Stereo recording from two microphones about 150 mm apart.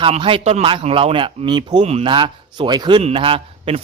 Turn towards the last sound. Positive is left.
turn(degrees=-40)  # may be behind; listen again after turning